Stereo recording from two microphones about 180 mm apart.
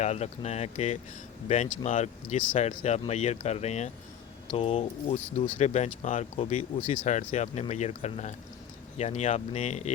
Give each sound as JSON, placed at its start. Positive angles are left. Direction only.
{"t": 0.0, "sound": "speech", "side_deg": 35}